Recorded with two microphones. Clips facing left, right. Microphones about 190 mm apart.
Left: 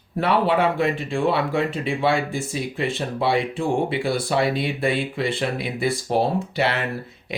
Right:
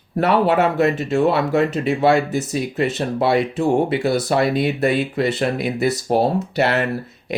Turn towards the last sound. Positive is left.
turn(degrees=-45)  # may be behind; listen again after turning